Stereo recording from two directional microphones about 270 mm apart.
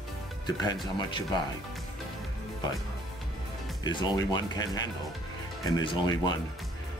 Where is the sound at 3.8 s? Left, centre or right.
Centre.